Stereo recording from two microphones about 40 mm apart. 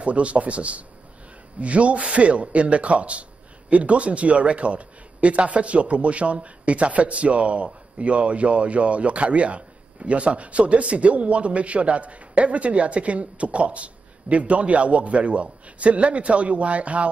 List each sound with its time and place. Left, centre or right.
0.0 s speech: right